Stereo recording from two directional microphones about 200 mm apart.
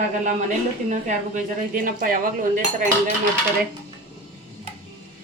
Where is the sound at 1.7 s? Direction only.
45° right (ahead or behind).